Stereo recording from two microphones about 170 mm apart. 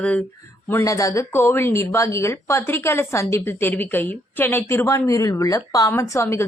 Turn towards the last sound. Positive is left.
turn(degrees=15)  # may be behind; listen again after turning